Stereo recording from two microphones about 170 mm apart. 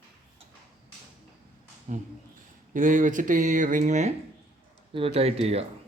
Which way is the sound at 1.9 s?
45° right (ahead or behind).